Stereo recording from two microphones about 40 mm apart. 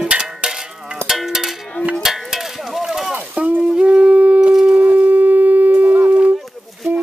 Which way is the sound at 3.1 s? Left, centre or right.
Right.